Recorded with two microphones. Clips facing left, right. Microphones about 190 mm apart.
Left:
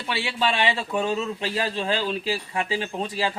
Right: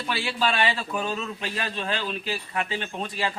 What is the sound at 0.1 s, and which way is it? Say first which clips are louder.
A man's voice: left 1 dB; 25° left (ahead or behind).